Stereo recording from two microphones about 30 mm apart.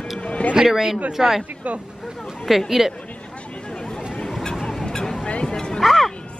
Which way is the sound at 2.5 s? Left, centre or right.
Centre.